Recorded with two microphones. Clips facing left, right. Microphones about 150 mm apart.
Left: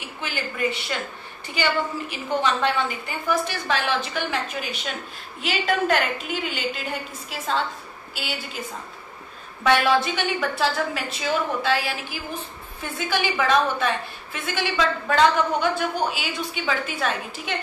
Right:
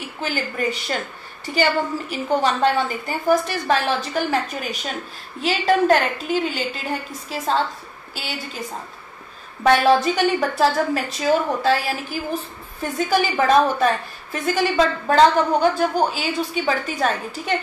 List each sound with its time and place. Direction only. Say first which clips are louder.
0.2 s a woman's voice: right 3 dB; 40° right (ahead or behind)
9.6 s a woman's voice: right 4 dB; 40° right (ahead or behind)